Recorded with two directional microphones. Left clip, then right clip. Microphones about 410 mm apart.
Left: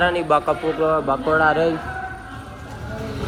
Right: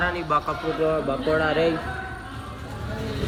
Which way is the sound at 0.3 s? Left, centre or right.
Left.